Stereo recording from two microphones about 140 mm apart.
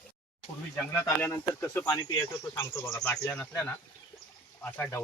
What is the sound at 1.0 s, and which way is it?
Speech, 20° left (ahead or behind).